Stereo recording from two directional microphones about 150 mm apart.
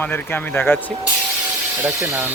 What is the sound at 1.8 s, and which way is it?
Speech, 10° right (ahead or behind).